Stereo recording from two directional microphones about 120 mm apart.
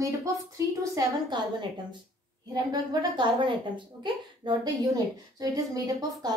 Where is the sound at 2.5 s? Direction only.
40° right (ahead or behind).